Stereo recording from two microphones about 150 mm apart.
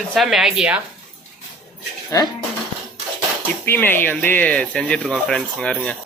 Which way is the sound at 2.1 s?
20° left (ahead or behind).